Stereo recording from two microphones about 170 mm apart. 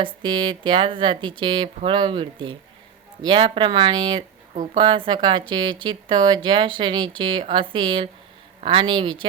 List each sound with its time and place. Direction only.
0.0 s speech: 30° right (ahead or behind)